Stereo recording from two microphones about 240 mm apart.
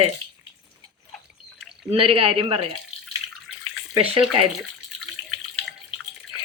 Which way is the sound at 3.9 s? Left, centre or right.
Right.